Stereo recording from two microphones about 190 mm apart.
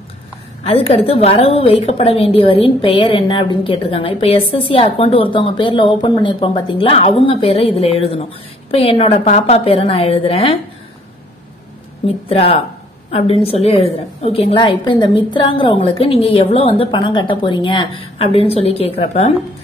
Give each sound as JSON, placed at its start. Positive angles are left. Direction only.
{"t": 0.7, "sound": "a woman's voice", "side_deg": 30}
{"t": 12.3, "sound": "a woman's voice", "side_deg": 30}